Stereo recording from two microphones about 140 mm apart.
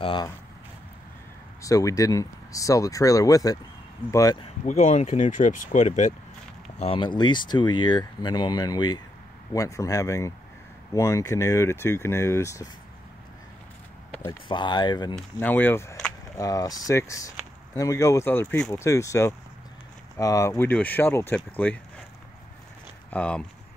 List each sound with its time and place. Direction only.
0.0 s speech: 35° left (ahead or behind)
1.6 s speech: 25° left (ahead or behind)
4.6 s speech: 60° left (ahead or behind)
6.8 s speech: 40° left (ahead or behind); by 12.6 s 20° left (ahead or behind)
14.5 s speech: 35° left (ahead or behind)
15.3 s speech: 15° left (ahead or behind)
23.0 s speech: 10° left (ahead or behind)